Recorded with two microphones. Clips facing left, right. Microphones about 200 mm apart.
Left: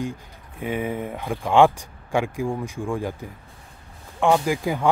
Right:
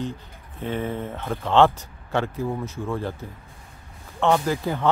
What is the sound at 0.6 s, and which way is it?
Speech, 10° left (ahead or behind).